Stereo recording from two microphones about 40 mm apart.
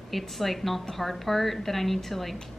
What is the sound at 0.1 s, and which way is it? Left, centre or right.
A woman's voice, centre.